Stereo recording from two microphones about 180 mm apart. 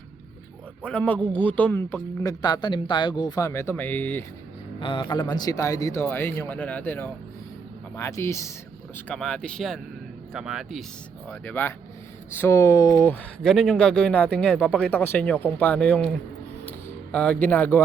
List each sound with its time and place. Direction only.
0.9 s speech: 10° left (ahead or behind)
2.4 s speech: 25° left (ahead or behind)
4.8 s speech: 25° left (ahead or behind)
9.0 s speech: 5° left (ahead or behind)
11.3 s speech: 10° left (ahead or behind)
13.4 s speech: centre (ahead or behind)